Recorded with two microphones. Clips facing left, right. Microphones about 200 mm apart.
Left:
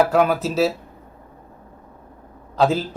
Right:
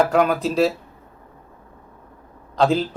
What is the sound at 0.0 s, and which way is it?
Speech, 5° left (ahead or behind).